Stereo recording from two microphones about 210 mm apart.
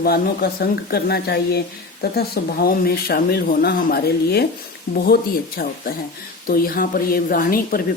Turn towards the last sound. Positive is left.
turn(degrees=45)  # may be behind; listen again after turning